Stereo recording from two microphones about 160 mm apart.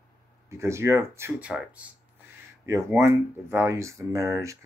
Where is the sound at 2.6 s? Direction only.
20° right (ahead or behind).